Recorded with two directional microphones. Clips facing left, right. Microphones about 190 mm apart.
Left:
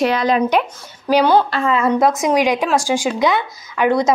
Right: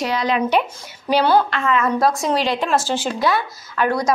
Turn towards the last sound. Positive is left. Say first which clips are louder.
# left 4 dB
turn(degrees=20)  # may be behind; listen again after turning